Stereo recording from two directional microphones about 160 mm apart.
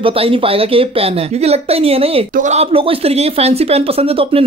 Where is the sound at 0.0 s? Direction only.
35° right (ahead or behind).